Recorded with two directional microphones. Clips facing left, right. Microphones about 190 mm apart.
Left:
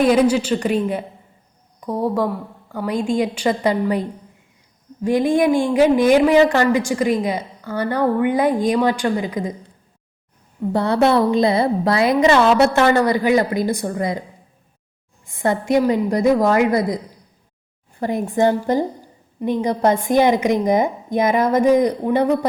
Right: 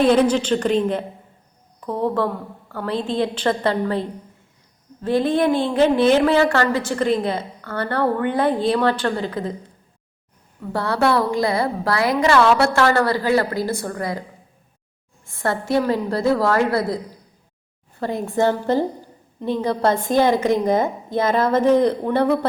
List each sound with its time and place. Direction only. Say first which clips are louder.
0.0 s a woman's voice: left 1 dB; 10° left (ahead or behind)
5.0 s a woman's voice: left 2 dB; 15° left (ahead or behind)
10.6 s a woman's voice: left 4 dB; 20° left (ahead or behind)
15.3 s a woman's voice: left 3 dB; 15° left (ahead or behind)
18.0 s a woman's voice: left 2 dB; 15° left (ahead or behind)